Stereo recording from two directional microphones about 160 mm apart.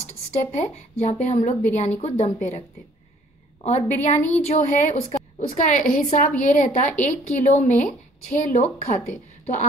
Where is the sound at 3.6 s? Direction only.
45° left (ahead or behind).